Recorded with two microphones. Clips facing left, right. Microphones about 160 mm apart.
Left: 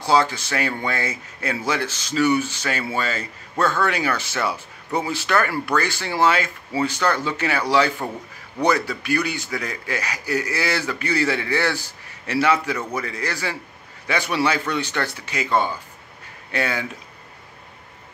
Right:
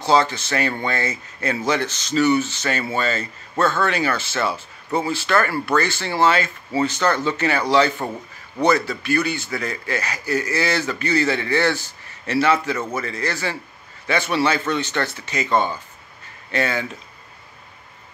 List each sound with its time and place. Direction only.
0.0 s speech: 10° left (ahead or behind)